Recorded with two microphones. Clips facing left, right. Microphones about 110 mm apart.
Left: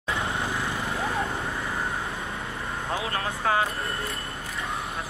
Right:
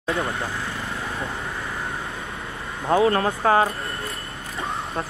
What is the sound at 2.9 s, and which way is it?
Speech, 40° right (ahead or behind).